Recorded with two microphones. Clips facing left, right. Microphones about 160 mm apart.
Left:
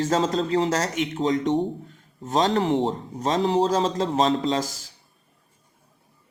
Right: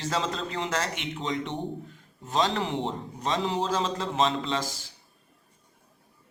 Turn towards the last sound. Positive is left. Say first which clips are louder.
# left 6 dB
turn(degrees=40)  # may be behind; listen again after turning